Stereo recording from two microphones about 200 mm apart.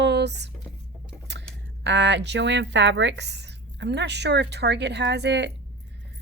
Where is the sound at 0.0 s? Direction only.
60° right (ahead or behind).